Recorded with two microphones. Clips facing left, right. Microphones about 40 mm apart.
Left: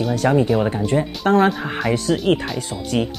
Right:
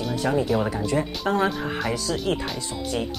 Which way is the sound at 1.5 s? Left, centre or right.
Centre.